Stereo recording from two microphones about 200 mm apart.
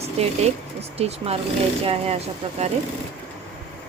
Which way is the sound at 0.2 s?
30° right (ahead or behind).